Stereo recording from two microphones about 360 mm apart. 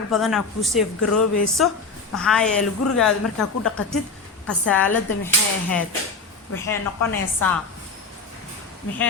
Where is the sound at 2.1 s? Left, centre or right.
Centre.